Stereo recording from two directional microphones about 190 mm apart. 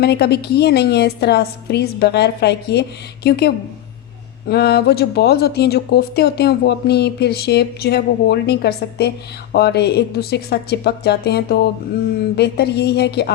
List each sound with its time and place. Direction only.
0.0 s speech: 60° left (ahead or behind)